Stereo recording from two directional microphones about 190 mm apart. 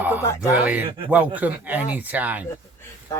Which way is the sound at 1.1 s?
10° right (ahead or behind).